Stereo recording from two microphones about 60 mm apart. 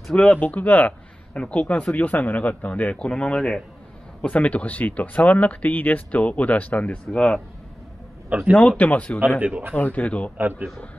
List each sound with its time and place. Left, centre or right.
0.1 s speech: left
7.2 s speech: centre
8.5 s speech: left
9.4 s speech: right
9.8 s speech: left
10.3 s a man's voice: right